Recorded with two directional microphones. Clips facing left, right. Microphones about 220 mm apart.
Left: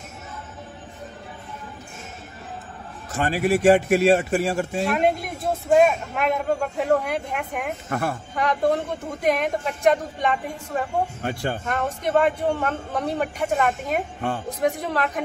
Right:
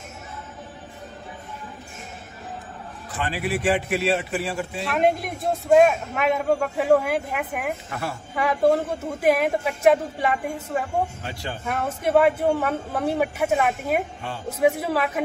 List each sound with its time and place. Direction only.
3.1 s a man's voice: 45° left (ahead or behind)
4.8 s a man's voice: centre (ahead or behind)
7.9 s a man's voice: 50° left (ahead or behind)
8.4 s a man's voice: 5° right (ahead or behind)
11.2 s a man's voice: 50° left (ahead or behind)
11.6 s a man's voice: 5° right (ahead or behind)